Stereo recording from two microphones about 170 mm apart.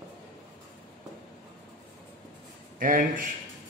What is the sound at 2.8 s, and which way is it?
Speech, 55° right (ahead or behind).